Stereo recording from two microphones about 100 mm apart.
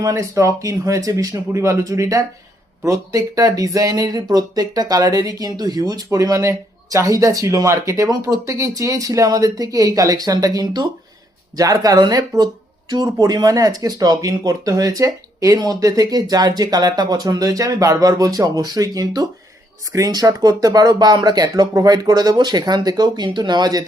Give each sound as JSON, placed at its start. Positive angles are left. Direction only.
{"t": 0.0, "sound": "speech", "side_deg": -30}